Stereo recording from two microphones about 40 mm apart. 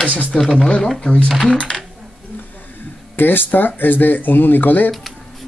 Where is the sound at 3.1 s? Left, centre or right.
Left.